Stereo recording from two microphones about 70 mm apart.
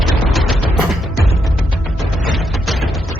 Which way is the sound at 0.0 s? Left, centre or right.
Centre.